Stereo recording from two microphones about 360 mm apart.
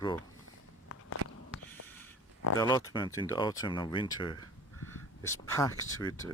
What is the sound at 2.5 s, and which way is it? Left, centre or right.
Speech, centre.